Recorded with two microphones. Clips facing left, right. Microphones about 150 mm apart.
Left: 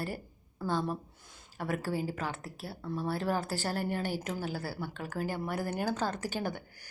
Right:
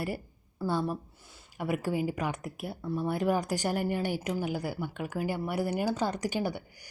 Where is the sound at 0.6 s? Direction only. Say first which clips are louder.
Right 2 dB; 10° right (ahead or behind).